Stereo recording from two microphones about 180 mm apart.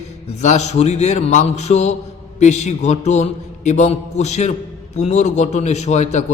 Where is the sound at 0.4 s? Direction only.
40° left (ahead or behind).